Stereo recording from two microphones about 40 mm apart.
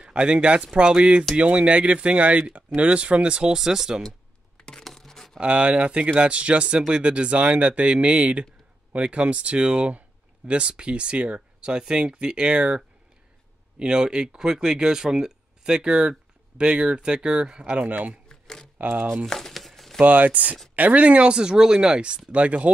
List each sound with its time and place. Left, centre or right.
0.0 s speech: right
3.6 s speech: centre
4.6 s a sound: centre
5.4 s speech: right
17.8 s speech: right
18.3 s a sound: centre
18.8 s speech: right
19.2 s crumpling: centre
20.0 s speech: right